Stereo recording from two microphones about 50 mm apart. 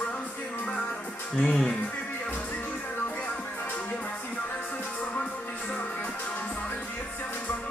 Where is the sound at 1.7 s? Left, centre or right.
Left.